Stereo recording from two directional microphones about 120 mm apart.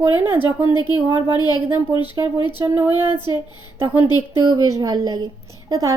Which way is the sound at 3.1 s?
40° left (ahead or behind).